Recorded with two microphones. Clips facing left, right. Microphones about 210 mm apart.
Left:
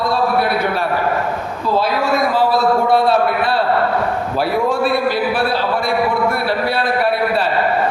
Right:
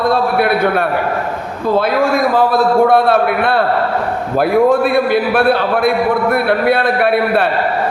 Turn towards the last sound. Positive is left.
turn(degrees=-60)  # may be behind; listen again after turning